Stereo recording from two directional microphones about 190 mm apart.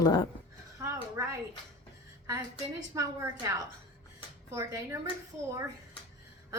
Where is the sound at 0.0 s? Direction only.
20° left (ahead or behind).